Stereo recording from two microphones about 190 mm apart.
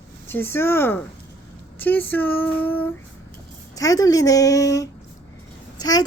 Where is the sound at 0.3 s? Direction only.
10° left (ahead or behind).